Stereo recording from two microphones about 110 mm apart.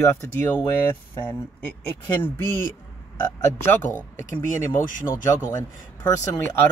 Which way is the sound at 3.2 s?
40° left (ahead or behind).